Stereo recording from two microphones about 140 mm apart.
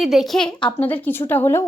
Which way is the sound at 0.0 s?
Centre (ahead or behind).